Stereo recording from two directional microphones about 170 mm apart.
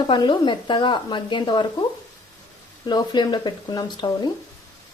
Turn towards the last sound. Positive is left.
turn(degrees=25)  # may be behind; listen again after turning